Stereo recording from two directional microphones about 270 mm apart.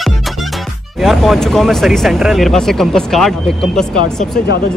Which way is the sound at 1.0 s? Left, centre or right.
Centre.